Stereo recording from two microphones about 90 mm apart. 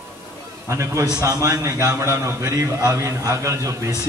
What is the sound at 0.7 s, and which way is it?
A man's voice, 35° right (ahead or behind).